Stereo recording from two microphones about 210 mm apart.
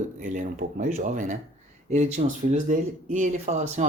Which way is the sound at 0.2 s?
35° right (ahead or behind).